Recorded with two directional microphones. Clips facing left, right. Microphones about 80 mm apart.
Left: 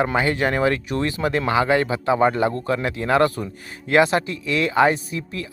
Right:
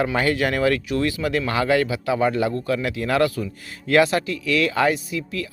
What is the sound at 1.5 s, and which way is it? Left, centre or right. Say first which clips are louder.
Speech: left 2 dB; left.